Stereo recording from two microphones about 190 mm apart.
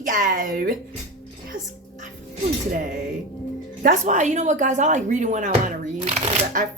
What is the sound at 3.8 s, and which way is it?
Speech, 40° right (ahead or behind).